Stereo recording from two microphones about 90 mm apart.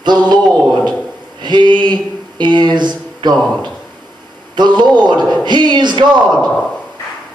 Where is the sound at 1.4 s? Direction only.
55° right (ahead or behind).